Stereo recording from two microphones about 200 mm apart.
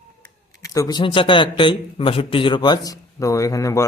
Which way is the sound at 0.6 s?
20° left (ahead or behind).